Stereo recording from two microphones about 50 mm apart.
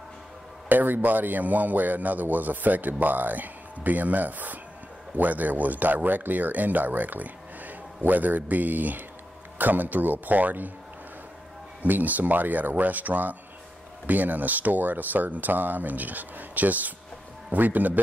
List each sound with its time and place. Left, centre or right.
0.7 s a man's voice: right
11.8 s a man's voice: right